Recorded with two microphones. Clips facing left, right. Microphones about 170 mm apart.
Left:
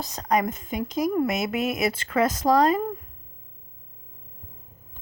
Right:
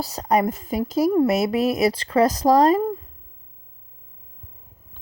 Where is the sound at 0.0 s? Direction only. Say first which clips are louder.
Right 4 dB; 35° right (ahead or behind).